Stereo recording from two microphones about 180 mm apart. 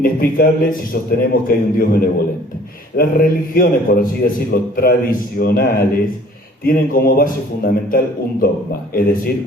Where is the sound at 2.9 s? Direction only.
55° left (ahead or behind).